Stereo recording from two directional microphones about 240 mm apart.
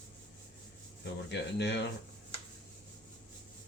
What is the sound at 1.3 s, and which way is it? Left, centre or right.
Speech, left.